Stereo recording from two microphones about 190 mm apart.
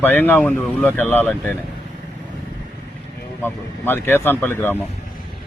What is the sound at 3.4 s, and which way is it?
A man's voice, 10° left (ahead or behind).